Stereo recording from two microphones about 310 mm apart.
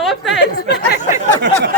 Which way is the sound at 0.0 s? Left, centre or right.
Centre.